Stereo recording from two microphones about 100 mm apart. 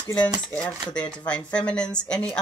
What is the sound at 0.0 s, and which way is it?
Speech, 15° left (ahead or behind).